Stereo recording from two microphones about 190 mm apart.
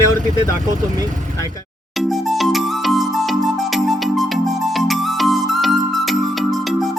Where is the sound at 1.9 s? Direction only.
Centre (ahead or behind).